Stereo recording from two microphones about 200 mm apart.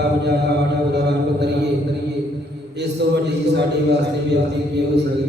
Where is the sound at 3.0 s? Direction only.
55° right (ahead or behind).